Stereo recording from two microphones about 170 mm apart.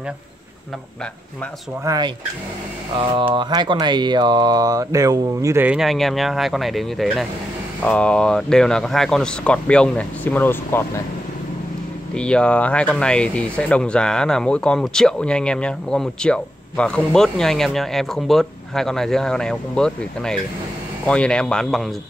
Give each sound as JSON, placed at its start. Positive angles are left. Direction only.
{"t": 1.9, "sound": "speech", "side_deg": -25}
{"t": 12.1, "sound": "speech", "side_deg": 5}